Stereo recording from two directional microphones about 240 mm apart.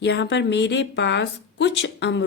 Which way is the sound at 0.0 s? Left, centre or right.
Left.